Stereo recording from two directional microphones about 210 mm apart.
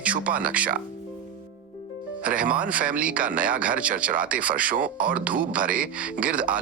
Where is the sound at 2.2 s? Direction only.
5° right (ahead or behind).